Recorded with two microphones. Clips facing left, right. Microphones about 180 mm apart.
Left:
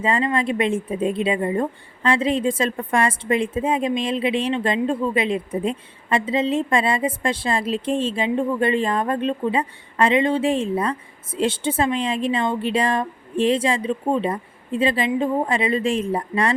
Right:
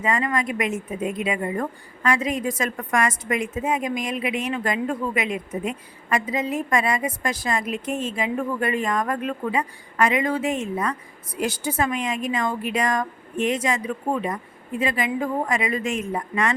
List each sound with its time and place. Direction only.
0.0 s a woman's voice: 30° left (ahead or behind)